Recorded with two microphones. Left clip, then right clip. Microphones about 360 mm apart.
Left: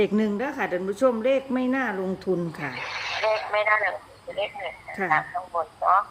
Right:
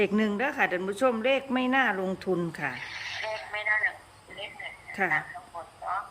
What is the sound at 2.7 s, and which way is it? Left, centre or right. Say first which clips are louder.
A woman's voice: left 6 dB; centre.